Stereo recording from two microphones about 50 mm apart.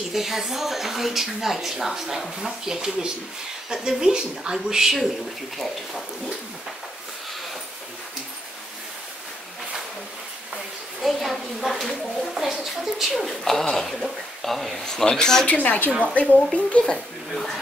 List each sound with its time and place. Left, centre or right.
0.1 s a woman's voice: centre
5.6 s a woman's voice: centre
10.5 s a woman's voice: centre
15.4 s a woman's voice: left
17.3 s a woman's voice: centre